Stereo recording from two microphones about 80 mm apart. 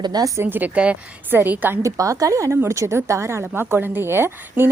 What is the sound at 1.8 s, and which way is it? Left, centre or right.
A woman's voice, right.